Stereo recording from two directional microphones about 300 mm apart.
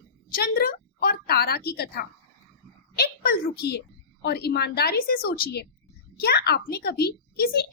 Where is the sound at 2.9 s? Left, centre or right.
Left.